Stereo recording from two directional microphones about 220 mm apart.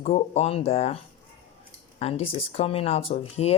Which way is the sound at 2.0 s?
25° left (ahead or behind).